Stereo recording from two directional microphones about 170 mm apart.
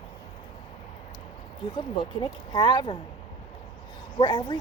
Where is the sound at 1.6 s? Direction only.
25° left (ahead or behind).